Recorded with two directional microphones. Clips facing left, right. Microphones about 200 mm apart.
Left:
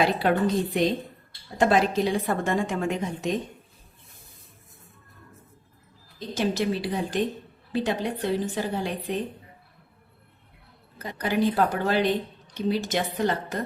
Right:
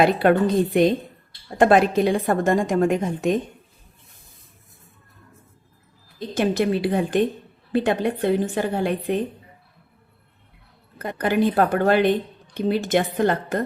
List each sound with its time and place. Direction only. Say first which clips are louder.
0.0 s a woman's voice: right 5 dB; 55° right (ahead or behind)
6.1 s a woman's voice: right 5 dB; 55° right (ahead or behind)
10.9 s a woman's voice: right 5 dB; 55° right (ahead or behind)